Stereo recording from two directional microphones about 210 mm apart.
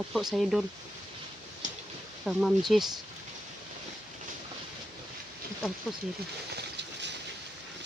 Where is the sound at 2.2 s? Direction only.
Centre (ahead or behind).